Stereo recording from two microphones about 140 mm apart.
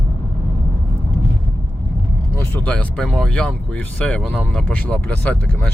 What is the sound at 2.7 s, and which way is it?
Speech, 5° left (ahead or behind).